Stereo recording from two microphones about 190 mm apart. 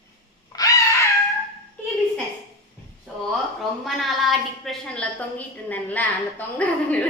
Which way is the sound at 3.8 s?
Centre (ahead or behind).